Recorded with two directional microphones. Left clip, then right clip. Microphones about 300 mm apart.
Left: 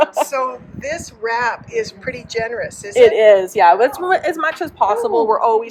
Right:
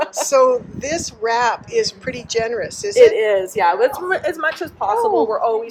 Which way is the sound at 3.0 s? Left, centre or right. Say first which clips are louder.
Left 3 dB; left.